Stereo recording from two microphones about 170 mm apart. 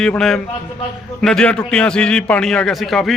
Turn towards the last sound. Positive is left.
turn(degrees=0)  # may be behind; listen again after turning